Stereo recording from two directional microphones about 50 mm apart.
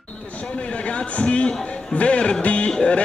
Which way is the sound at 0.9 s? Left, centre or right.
Left.